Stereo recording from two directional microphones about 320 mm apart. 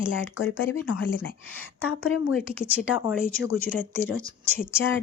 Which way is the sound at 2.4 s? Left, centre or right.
Centre.